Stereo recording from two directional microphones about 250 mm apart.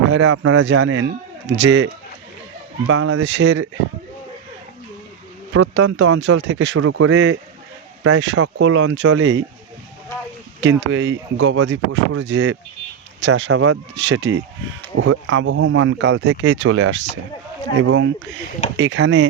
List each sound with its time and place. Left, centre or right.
0.1 s speech: right
5.5 s speech: right
10.6 s speech: right